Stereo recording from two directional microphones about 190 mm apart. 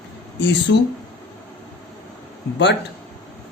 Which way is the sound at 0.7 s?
70° left (ahead or behind).